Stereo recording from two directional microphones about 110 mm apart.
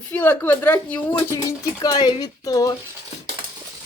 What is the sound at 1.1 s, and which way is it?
Speech, 25° left (ahead or behind).